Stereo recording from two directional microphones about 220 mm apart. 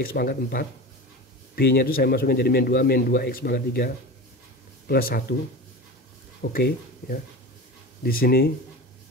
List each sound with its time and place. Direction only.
0.0 s a man's voice: 45° left (ahead or behind)
6.5 s a man's voice: 40° left (ahead or behind)